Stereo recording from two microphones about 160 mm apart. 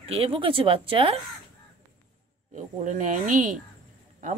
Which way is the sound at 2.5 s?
50° right (ahead or behind).